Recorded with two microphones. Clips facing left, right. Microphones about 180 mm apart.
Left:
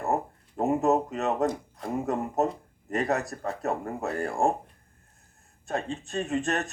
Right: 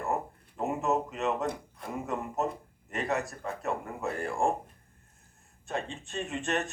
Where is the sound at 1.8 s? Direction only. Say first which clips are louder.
Left 6 dB; 40° left (ahead or behind).